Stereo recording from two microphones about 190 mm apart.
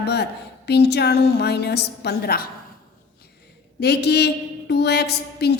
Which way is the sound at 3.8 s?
60° left (ahead or behind).